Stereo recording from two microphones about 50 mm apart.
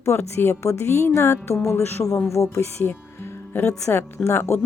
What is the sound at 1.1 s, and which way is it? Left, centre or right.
Speech, left.